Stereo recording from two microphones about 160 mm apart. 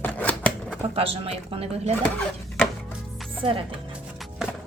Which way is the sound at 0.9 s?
35° right (ahead or behind).